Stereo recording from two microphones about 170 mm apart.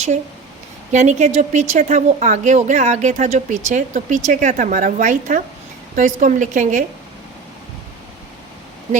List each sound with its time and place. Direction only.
0.9 s speech: 45° right (ahead or behind)